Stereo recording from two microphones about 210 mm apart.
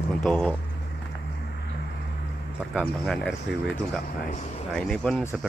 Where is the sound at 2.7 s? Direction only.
Centre (ahead or behind).